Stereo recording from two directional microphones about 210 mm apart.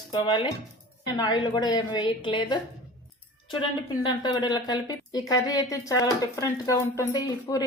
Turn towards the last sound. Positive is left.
turn(degrees=15)  # may be behind; listen again after turning